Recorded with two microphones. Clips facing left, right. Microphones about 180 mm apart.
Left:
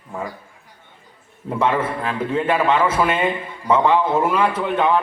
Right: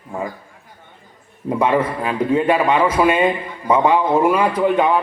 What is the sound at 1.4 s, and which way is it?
A man's voice, 15° right (ahead or behind).